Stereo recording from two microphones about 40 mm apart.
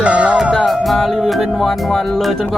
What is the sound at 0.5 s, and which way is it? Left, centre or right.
Music, centre.